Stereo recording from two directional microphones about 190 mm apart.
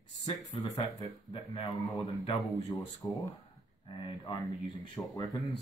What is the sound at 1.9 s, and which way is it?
Speech, 20° left (ahead or behind).